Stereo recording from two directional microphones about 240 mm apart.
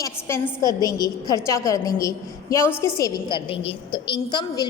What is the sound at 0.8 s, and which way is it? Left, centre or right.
A woman's voice, centre.